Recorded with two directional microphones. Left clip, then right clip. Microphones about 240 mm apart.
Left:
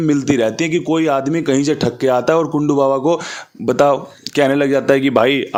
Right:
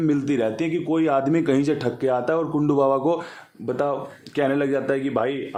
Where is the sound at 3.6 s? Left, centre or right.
Left.